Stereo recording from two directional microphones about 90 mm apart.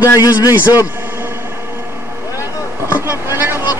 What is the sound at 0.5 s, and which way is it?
Speech, 20° right (ahead or behind).